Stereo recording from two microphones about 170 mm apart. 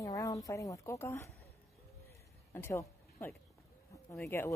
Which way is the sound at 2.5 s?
15° left (ahead or behind).